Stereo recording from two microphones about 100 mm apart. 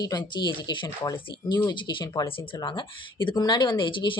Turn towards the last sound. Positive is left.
turn(degrees=55)  # may be behind; listen again after turning